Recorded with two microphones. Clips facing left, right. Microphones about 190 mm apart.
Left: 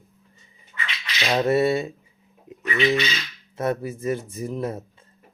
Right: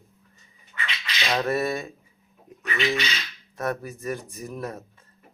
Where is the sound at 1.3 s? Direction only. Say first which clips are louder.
Left 6 dB; 25° left (ahead or behind).